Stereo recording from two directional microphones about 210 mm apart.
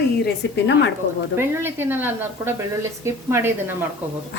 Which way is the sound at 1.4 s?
10° right (ahead or behind).